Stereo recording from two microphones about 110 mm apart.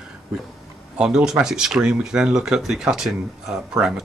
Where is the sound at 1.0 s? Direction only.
5° right (ahead or behind).